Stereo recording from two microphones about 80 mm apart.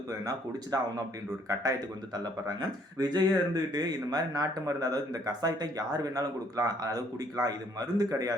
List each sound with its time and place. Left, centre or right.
0.1 s speech: right
2.1 s speech: right